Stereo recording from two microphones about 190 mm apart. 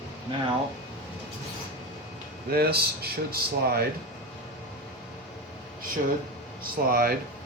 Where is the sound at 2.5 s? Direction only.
55° right (ahead or behind).